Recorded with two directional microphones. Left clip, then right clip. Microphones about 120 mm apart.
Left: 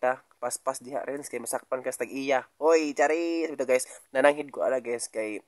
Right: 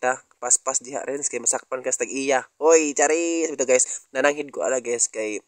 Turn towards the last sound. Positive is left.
turn(degrees=-30)  # may be behind; listen again after turning